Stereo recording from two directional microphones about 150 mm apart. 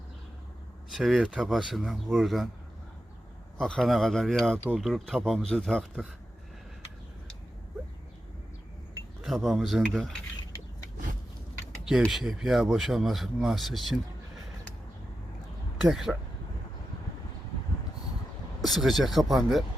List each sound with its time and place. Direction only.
0.9 s speech: centre (ahead or behind)
3.6 s speech: 5° left (ahead or behind)
9.2 s speech: centre (ahead or behind)
11.9 s speech: centre (ahead or behind)
15.8 s speech: 5° right (ahead or behind)
18.6 s speech: centre (ahead or behind)